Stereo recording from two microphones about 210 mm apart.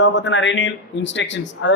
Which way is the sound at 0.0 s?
60° left (ahead or behind).